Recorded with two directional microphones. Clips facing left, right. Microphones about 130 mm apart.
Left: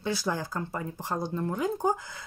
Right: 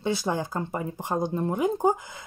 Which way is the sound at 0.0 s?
20° right (ahead or behind).